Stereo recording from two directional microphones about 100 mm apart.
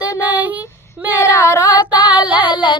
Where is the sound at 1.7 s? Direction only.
45° left (ahead or behind).